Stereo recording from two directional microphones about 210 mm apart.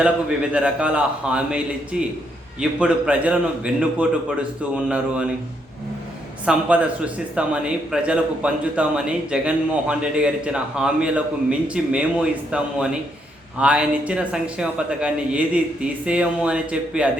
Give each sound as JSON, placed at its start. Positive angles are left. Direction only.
{"t": 0.5, "sound": "speech", "side_deg": -5}
{"t": 6.4, "sound": "speech", "side_deg": -5}